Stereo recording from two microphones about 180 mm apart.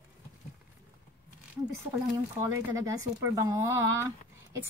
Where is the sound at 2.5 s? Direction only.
15° right (ahead or behind).